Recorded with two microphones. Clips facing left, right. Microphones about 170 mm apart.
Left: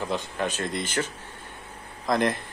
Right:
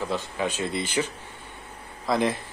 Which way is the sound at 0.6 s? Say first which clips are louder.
Right 2 dB; 10° right (ahead or behind).